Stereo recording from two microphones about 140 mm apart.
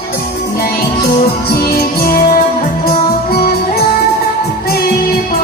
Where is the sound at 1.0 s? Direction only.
90° left.